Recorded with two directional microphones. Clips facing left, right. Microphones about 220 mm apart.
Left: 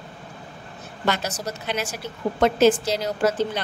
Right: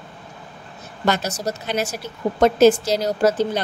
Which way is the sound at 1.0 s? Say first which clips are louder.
Right 4 dB; 40° right (ahead or behind).